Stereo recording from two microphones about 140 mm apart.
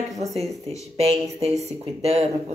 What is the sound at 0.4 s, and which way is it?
A woman's voice, 45° right (ahead or behind).